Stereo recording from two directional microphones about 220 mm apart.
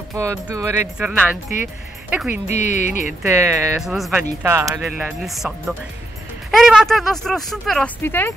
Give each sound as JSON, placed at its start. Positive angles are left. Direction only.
{"t": 0.1, "sound": "speech", "side_deg": -15}
{"t": 2.5, "sound": "music", "side_deg": 35}
{"t": 3.3, "sound": "speech", "side_deg": -10}
{"t": 3.8, "sound": "speech", "side_deg": 0}
{"t": 4.8, "sound": "speech", "side_deg": 0}